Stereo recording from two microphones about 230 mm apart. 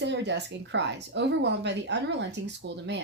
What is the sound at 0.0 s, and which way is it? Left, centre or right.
Speech, right.